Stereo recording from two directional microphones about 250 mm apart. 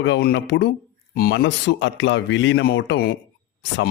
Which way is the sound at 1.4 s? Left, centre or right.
Left.